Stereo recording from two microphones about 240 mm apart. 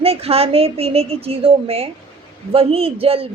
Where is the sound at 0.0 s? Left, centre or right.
Right.